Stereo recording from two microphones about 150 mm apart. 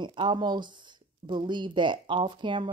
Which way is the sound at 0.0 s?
30° right (ahead or behind).